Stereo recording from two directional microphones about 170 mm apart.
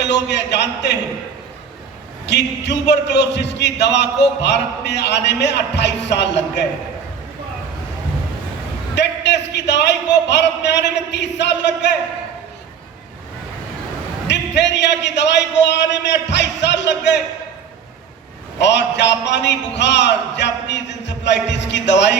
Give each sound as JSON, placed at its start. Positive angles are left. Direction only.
{"t": 0.0, "sound": "a man's voice", "side_deg": 90}
{"t": 2.2, "sound": "a man's voice", "side_deg": 90}
{"t": 9.0, "sound": "a man's voice", "side_deg": 90}
{"t": 14.3, "sound": "a man's voice", "side_deg": 90}
{"t": 18.6, "sound": "a man's voice", "side_deg": 90}